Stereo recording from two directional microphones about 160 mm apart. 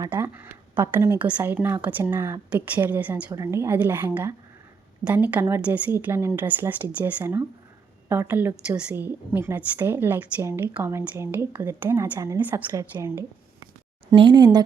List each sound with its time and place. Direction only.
0.1 s a woman's voice: 15° right (ahead or behind)
14.2 s speech: 30° right (ahead or behind)